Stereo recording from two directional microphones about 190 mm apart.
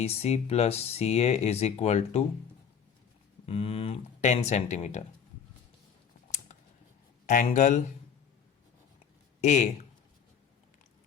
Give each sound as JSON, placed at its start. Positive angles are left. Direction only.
{"t": 0.0, "sound": "speech", "side_deg": 35}
{"t": 3.4, "sound": "speech", "side_deg": 30}
{"t": 7.3, "sound": "speech", "side_deg": 40}
{"t": 9.4, "sound": "speech", "side_deg": 40}